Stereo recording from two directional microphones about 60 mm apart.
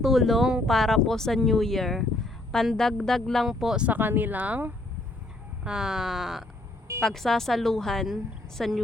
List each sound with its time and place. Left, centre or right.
0.0 s speech: centre
3.4 s speech: centre
3.8 s speech: right
5.6 s speech: centre